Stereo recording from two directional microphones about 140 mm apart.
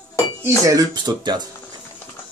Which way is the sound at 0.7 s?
30° right (ahead or behind).